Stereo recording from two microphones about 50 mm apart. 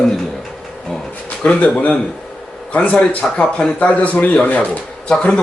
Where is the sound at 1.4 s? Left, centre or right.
Left.